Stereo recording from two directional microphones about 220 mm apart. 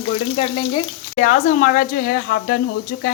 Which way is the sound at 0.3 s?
25° left (ahead or behind).